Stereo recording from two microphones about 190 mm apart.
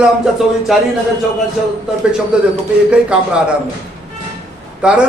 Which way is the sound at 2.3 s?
5° right (ahead or behind).